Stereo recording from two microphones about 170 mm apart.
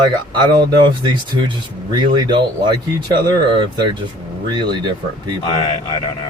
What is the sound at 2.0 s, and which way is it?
Speech, 30° right (ahead or behind).